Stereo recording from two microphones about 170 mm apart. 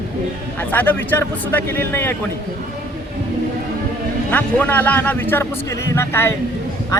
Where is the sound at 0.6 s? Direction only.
10° left (ahead or behind).